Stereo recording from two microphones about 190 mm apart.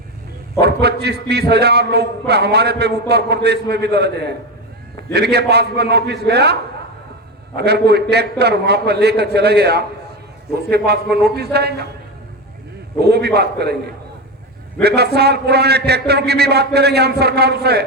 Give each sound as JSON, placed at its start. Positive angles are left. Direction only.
{"t": 0.6, "sound": "a man's voice", "side_deg": -60}
{"t": 5.1, "sound": "a man's voice", "side_deg": -60}
{"t": 13.0, "sound": "a man's voice", "side_deg": -60}
{"t": 14.8, "sound": "a man's voice", "side_deg": -60}